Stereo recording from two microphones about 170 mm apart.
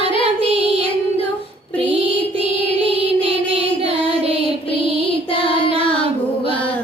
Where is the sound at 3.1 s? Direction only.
35° right (ahead or behind).